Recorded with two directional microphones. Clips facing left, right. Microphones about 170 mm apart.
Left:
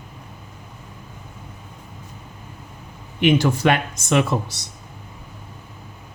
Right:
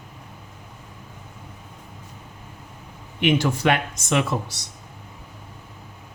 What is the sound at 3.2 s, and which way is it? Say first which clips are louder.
Speech: left 3 dB; 40° left (ahead or behind).